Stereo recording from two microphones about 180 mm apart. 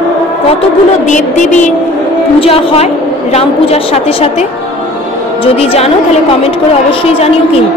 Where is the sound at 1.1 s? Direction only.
45° left (ahead or behind).